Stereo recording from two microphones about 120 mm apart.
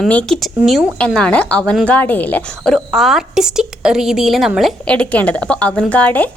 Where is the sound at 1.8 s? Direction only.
15° left (ahead or behind).